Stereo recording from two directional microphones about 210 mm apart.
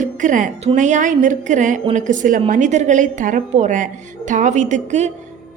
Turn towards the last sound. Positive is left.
turn(degrees=-35)  # may be behind; listen again after turning